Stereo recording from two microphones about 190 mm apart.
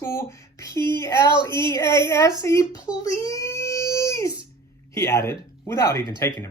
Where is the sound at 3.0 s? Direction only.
15° left (ahead or behind).